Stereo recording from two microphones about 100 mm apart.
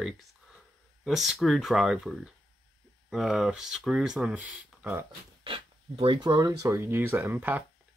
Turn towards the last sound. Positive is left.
turn(degrees=-20)  # may be behind; listen again after turning